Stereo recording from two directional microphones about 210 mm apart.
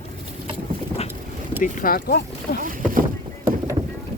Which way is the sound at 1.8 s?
45° left (ahead or behind).